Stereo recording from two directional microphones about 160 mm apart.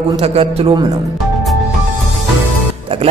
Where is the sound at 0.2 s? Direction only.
40° right (ahead or behind).